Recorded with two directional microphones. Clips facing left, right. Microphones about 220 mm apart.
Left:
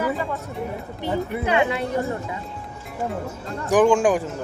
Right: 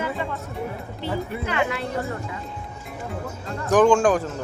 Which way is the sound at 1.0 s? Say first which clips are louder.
Left 3 dB; 20° left (ahead or behind).